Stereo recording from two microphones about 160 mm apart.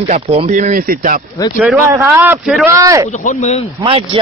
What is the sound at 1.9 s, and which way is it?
Speech, 15° right (ahead or behind).